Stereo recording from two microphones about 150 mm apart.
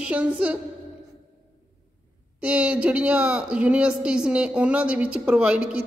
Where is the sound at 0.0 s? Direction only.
10° right (ahead or behind).